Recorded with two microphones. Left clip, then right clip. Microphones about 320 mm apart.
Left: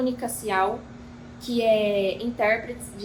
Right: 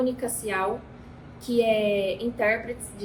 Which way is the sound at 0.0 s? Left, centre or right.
Centre.